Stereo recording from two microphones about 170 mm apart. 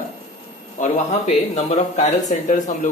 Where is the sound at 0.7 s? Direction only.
40° left (ahead or behind).